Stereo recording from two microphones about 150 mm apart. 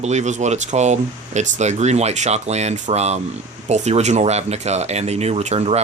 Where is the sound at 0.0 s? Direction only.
50° right (ahead or behind).